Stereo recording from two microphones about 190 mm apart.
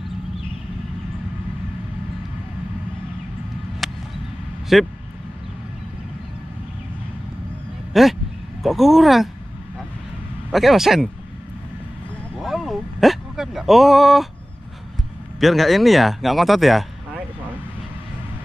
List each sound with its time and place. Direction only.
3.8 s a sound: centre (ahead or behind)
4.7 s a man's voice: centre (ahead or behind)
7.9 s a man's voice: centre (ahead or behind)
10.5 s a man's voice: centre (ahead or behind)
12.4 s speech: centre (ahead or behind)
15.4 s a man's voice: centre (ahead or behind)